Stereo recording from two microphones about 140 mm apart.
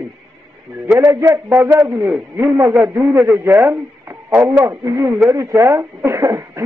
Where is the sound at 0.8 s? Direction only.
20° right (ahead or behind).